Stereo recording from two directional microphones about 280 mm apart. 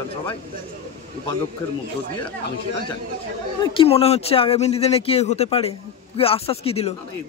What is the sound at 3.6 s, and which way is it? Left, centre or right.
Speech, centre.